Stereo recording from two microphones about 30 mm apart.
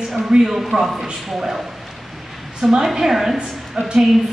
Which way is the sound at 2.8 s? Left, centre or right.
Centre.